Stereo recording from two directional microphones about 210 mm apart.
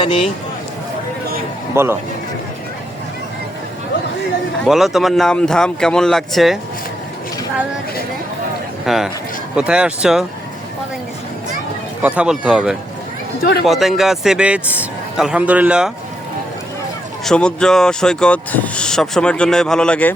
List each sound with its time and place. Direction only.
0.0 s speech: 25° left (ahead or behind)
1.7 s a man's voice: 10° right (ahead or behind)
4.6 s speech: centre (ahead or behind)
8.9 s speech: centre (ahead or behind)
12.0 s speech: 5° right (ahead or behind)
17.2 s speech: 5° left (ahead or behind)